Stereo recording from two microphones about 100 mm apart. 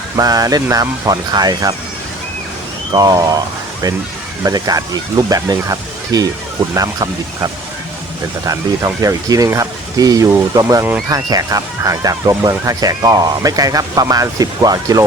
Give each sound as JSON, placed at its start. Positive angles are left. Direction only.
{"t": 0.2, "sound": "speech", "side_deg": -35}
{"t": 2.9, "sound": "speech", "side_deg": -40}
{"t": 4.4, "sound": "speech", "side_deg": -40}